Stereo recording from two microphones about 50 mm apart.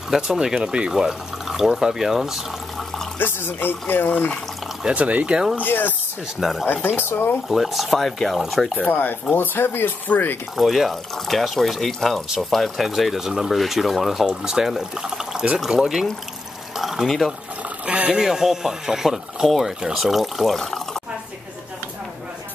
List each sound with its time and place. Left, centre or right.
0.1 s speech: centre
3.2 s speech: left
4.9 s speech: right
5.6 s speech: left
6.4 s speech: centre
7.0 s speech: left
7.4 s speech: centre
8.7 s speech: left
9.3 s speech: left
10.5 s speech: centre
14.2 s speech: centre
16.7 s a sound: centre
17.8 s a sound: right
18.2 s speech: centre